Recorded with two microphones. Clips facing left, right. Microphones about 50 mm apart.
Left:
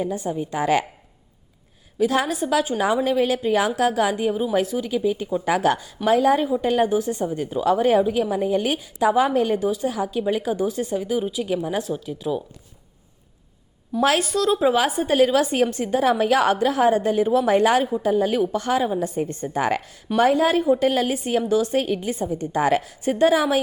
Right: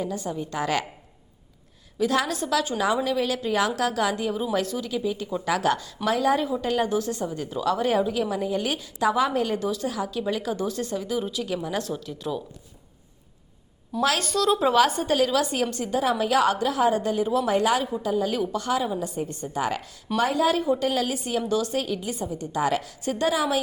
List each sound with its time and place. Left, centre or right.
0.0 s a woman's voice: left
2.0 s a woman's voice: left
4.9 s a woman's voice: left
14.2 s speech: centre
15.1 s a woman's voice: left